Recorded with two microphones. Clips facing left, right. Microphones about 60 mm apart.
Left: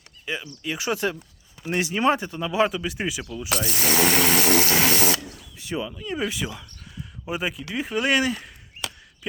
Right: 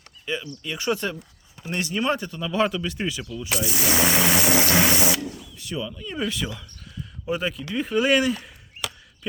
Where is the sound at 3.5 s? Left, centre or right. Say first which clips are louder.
Even; centre.